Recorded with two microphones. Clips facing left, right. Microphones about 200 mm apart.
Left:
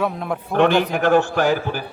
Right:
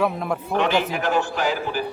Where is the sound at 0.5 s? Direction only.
55° left (ahead or behind).